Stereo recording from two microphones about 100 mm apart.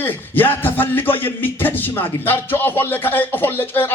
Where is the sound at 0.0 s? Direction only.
20° left (ahead or behind).